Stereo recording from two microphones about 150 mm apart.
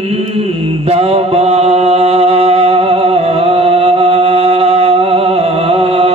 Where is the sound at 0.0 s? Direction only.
45° right (ahead or behind).